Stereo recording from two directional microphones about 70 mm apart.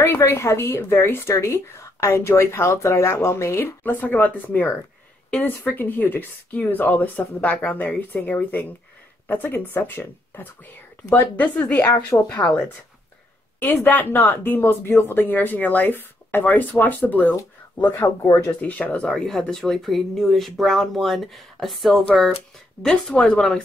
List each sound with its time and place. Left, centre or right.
0.0 s a woman's voice: left
3.8 s speech: left
11.8 s a woman's voice: left
12.4 s a woman's voice: centre
13.6 s speech: left
19.0 s speech: centre